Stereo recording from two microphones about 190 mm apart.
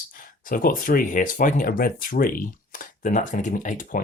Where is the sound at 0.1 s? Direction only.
45° left (ahead or behind).